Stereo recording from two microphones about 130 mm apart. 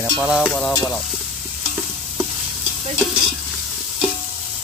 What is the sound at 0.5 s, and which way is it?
Stir, 10° left (ahead or behind).